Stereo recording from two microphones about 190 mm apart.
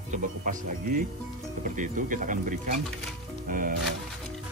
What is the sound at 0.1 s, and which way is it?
Speech, 45° right (ahead or behind).